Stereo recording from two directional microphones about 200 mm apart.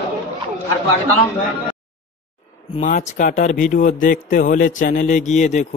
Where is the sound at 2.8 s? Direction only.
35° left (ahead or behind).